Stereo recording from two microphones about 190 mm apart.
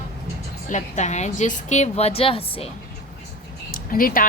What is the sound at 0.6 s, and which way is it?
Speech, 40° left (ahead or behind).